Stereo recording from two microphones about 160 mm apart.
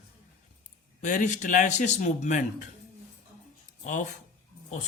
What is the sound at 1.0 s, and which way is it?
Speech, 50° left (ahead or behind).